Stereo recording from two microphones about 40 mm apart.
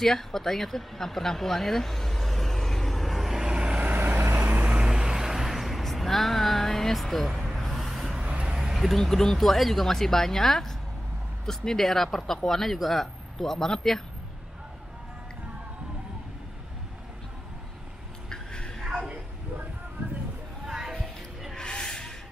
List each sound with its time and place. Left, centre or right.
0.0 s speech: centre
3.3 s vehicle: right
3.8 s vehicle: right
4.2 s vehicle: right
4.6 s vehicle: right
5.1 s vehicle: centre
7.3 s a sound: centre
8.2 s a sound: right
8.7 s speech: centre
18.3 s a sound: centre
20.6 s music: centre
21.5 s a sound: left